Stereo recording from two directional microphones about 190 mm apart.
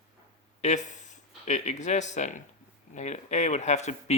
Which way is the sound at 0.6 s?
40° left (ahead or behind).